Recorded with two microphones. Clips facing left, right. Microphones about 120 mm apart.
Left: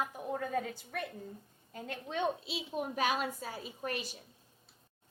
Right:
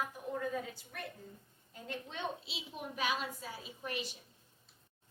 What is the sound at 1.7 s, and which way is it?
A woman's voice, 55° left (ahead or behind).